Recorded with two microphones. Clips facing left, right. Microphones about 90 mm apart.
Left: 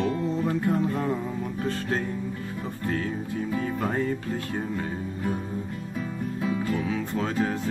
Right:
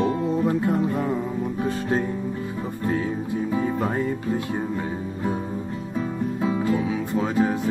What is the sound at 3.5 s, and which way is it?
Music, 20° right (ahead or behind).